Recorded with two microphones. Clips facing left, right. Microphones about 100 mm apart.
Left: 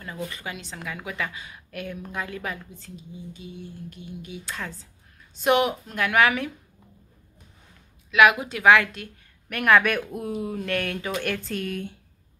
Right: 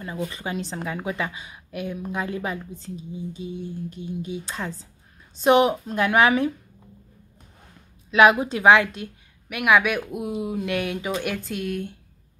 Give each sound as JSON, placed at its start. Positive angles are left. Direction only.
{"t": 0.0, "sound": "a woman's voice", "side_deg": -20}
{"t": 8.1, "sound": "a woman's voice", "side_deg": -30}
{"t": 9.5, "sound": "speech", "side_deg": -10}